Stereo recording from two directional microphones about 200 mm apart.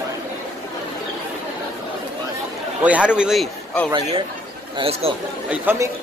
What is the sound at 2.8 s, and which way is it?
Speech, 5° right (ahead or behind).